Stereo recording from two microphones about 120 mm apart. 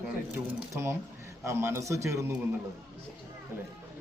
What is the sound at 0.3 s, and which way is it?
A man's voice, 25° right (ahead or behind).